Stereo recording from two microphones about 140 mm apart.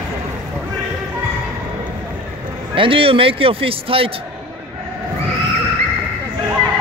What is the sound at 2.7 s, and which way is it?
Speech, 40° right (ahead or behind).